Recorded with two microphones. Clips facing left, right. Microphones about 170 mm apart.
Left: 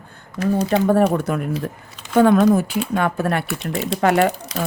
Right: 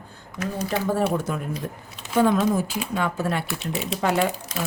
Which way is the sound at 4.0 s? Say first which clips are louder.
Left 6 dB; 70° left (ahead or behind).